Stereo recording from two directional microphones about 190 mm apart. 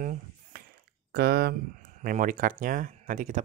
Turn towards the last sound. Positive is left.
turn(degrees=-40)  # may be behind; listen again after turning